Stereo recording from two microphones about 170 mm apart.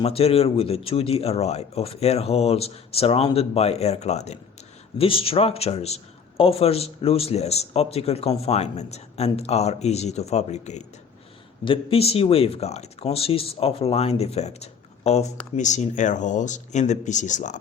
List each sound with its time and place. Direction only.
0.0 s speech: 35° left (ahead or behind)
11.6 s speech: 30° left (ahead or behind)